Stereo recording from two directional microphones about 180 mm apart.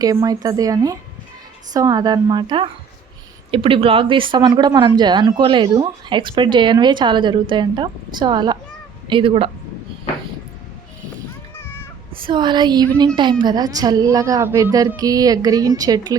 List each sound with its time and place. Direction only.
0.0 s speech: 20° right (ahead or behind)
11.5 s cat: 15° left (ahead or behind)
12.2 s speech: 25° right (ahead or behind)